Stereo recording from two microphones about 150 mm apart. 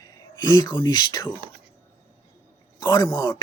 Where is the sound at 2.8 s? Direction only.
25° left (ahead or behind).